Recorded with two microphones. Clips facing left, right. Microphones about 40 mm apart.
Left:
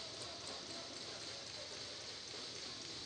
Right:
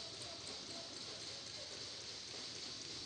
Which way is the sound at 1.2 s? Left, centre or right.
Left.